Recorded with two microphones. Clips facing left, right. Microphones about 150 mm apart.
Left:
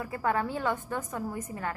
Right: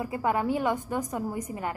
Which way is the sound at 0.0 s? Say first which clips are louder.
Right 2 dB; 15° right (ahead or behind).